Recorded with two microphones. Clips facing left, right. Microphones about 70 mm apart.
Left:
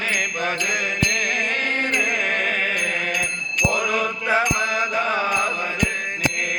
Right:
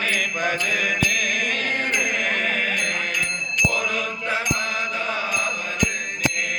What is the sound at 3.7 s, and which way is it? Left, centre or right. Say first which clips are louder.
Music: left 3 dB; left.